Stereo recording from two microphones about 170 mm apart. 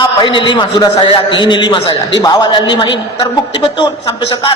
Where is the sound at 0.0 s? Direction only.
30° left (ahead or behind).